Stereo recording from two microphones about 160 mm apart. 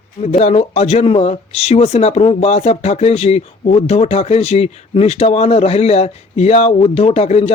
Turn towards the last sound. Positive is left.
turn(degrees=40)  # may be behind; listen again after turning